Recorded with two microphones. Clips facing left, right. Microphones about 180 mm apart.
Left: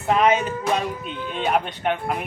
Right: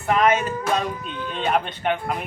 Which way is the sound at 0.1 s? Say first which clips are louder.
Left 1 dB; 20° left (ahead or behind).